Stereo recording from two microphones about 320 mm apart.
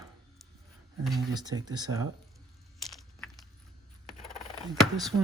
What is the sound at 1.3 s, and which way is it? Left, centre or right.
Speech, centre.